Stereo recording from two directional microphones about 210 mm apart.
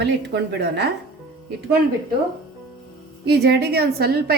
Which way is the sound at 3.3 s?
50° right (ahead or behind).